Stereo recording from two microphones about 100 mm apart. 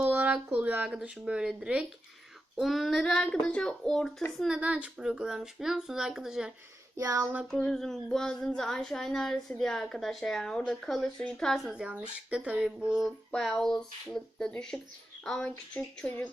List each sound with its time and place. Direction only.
0.0 s a sound: 20° right (ahead or behind)
0.5 s speech: 15° right (ahead or behind)
2.6 s speech: centre (ahead or behind)
4.4 s speech: 5° right (ahead or behind)
6.9 s a sound: 35° right (ahead or behind)
7.4 s speech: 5° left (ahead or behind)
11.7 s speech: 10° right (ahead or behind); by 16.3 s 15° left (ahead or behind)